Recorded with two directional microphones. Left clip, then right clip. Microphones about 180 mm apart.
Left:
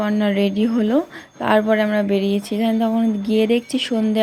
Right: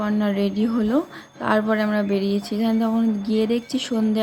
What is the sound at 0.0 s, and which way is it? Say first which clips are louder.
A woman's voice: left 4 dB; 15° left (ahead or behind).